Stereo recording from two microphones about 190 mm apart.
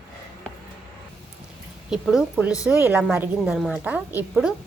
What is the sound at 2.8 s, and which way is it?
A woman's voice, 10° right (ahead or behind).